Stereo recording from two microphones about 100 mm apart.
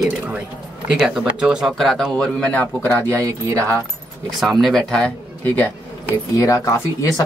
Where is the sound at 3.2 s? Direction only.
35° right (ahead or behind).